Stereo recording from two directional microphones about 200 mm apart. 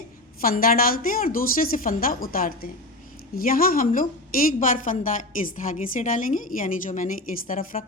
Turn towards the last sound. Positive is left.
turn(degrees=45)  # may be behind; listen again after turning